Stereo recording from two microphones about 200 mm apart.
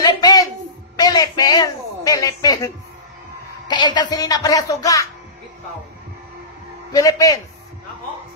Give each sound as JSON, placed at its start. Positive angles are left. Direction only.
{"t": 0.0, "sound": "music", "side_deg": 15}
{"t": 0.9, "sound": "a sound", "side_deg": 20}
{"t": 3.6, "sound": "speech", "side_deg": 20}
{"t": 6.9, "sound": "a man's voice", "side_deg": 20}